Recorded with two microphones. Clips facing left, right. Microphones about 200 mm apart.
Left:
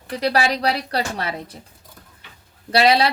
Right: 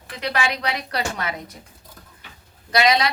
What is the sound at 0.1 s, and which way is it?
A woman's voice, 35° left (ahead or behind).